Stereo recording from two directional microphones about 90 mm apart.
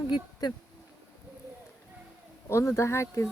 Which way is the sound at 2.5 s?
30° left (ahead or behind).